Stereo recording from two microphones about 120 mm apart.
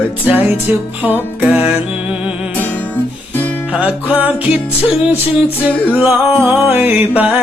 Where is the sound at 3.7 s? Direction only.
10° right (ahead or behind).